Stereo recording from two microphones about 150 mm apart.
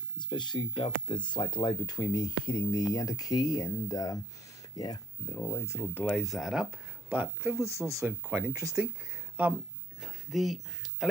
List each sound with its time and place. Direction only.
0.3 s speech: 30° left (ahead or behind); by 6.1 s 15° left (ahead or behind)
6.1 s speech: centre (ahead or behind)
10.0 s a sound: centre (ahead or behind)